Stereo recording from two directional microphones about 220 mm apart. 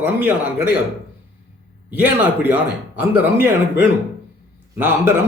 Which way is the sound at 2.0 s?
10° right (ahead or behind).